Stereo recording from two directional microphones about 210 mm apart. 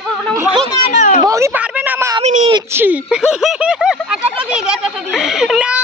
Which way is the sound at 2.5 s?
20° right (ahead or behind).